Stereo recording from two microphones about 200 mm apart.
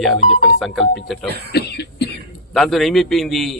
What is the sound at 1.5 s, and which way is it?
Cough, 55° left (ahead or behind).